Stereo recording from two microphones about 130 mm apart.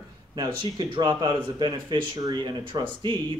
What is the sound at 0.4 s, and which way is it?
Speech, 35° right (ahead or behind).